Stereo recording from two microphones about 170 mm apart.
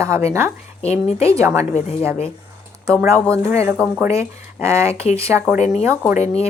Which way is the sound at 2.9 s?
15° right (ahead or behind).